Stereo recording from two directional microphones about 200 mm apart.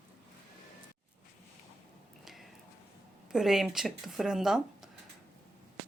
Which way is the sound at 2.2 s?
Centre (ahead or behind).